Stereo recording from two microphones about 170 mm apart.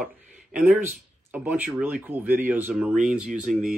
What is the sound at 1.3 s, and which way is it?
Speech, 10° right (ahead or behind).